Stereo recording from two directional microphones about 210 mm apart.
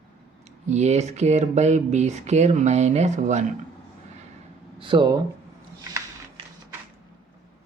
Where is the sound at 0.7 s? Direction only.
30° right (ahead or behind).